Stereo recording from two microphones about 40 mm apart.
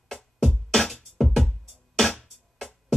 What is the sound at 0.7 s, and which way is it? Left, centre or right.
Music, centre.